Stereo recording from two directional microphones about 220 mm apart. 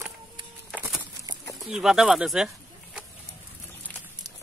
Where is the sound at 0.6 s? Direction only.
Centre (ahead or behind).